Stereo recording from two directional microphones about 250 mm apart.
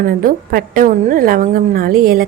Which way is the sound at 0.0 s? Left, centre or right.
Right.